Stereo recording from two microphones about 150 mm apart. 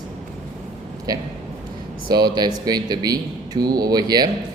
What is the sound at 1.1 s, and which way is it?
Speech, 25° right (ahead or behind).